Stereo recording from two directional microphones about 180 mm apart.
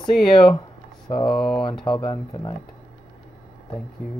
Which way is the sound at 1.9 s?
25° left (ahead or behind).